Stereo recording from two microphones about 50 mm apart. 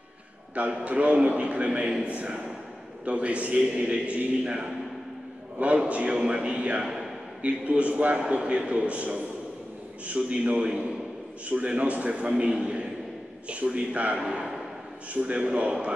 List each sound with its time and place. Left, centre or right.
0.6 s a man's voice: right
8.2 s a man's voice: right